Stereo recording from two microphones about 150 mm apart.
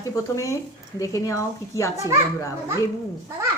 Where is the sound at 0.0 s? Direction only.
20° left (ahead or behind).